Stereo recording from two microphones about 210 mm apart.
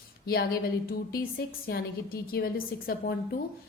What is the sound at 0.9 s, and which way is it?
A woman's voice, 45° left (ahead or behind).